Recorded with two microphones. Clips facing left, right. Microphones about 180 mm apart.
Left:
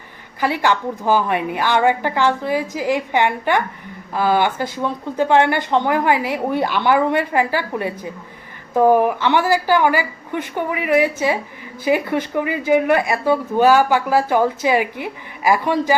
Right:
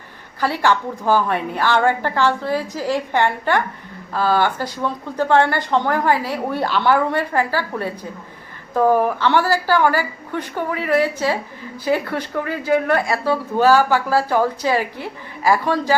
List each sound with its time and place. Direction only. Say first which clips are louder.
0.3 s speech: even; 15° left (ahead or behind)